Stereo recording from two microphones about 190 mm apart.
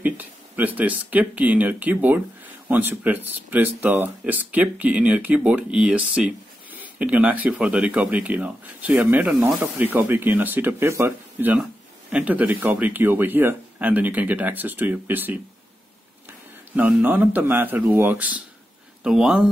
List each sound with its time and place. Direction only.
0.0 s speech: 10° right (ahead or behind)